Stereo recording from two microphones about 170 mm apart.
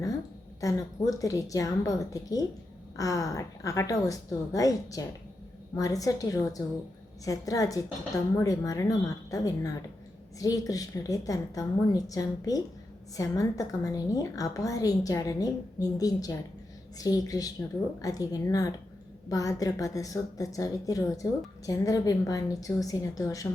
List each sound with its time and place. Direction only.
0.6 s a woman's voice: 20° left (ahead or behind)